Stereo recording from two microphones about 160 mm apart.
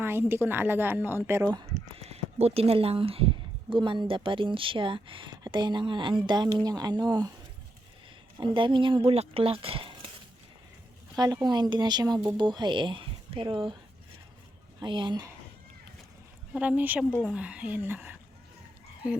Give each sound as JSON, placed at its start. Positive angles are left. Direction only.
{"t": 0.0, "sound": "a woman's voice", "side_deg": -15}
{"t": 1.6, "sound": "speech", "side_deg": -40}
{"t": 8.4, "sound": "speech", "side_deg": -30}
{"t": 11.1, "sound": "speech", "side_deg": -25}
{"t": 14.8, "sound": "speech", "side_deg": -30}
{"t": 16.6, "sound": "a woman's voice", "side_deg": -10}
{"t": 17.1, "sound": "a woman's voice", "side_deg": 0}